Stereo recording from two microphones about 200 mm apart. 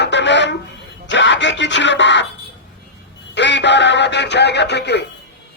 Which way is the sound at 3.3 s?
60° left (ahead or behind).